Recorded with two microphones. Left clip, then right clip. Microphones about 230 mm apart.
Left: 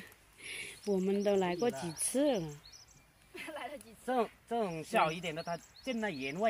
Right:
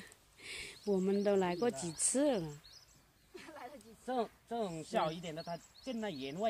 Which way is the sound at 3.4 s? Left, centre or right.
Left.